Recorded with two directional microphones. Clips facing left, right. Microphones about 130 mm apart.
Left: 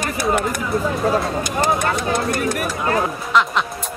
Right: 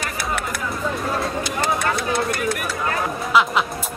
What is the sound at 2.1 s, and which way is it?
Speech, 45° left (ahead or behind).